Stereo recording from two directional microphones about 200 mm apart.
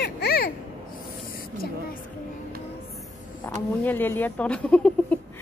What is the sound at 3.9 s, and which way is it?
Speech, 10° left (ahead or behind).